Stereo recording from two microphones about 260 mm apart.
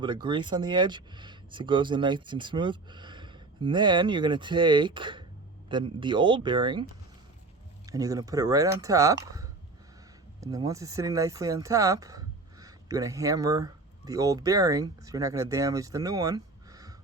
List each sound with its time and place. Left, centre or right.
0.0 s speech: centre
7.9 s speech: centre